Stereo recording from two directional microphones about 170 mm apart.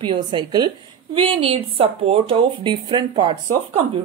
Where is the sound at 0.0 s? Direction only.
25° right (ahead or behind).